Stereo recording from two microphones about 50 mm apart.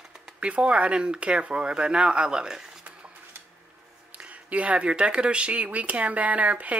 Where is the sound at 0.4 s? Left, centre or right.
Right.